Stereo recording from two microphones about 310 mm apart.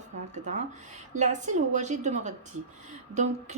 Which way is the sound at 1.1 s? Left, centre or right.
Right.